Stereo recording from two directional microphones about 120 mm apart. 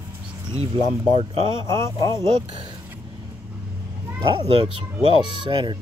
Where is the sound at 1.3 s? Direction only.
45° right (ahead or behind).